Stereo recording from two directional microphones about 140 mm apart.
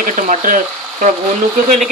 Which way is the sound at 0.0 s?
70° right (ahead or behind).